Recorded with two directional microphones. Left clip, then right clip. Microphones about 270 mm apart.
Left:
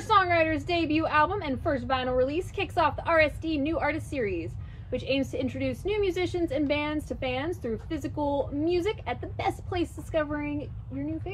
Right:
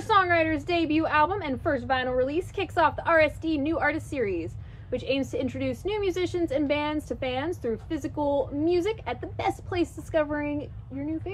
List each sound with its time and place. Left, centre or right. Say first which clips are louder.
0.0 s a woman's voice: right 1 dB; centre